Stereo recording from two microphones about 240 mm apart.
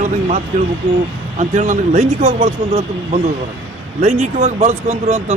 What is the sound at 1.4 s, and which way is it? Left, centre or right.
Speech, right.